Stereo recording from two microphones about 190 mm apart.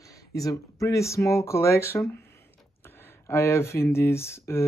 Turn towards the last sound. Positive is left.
turn(degrees=15)  # may be behind; listen again after turning